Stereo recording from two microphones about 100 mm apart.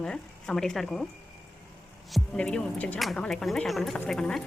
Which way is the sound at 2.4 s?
10° left (ahead or behind).